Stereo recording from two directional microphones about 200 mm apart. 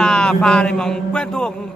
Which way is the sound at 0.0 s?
5° left (ahead or behind).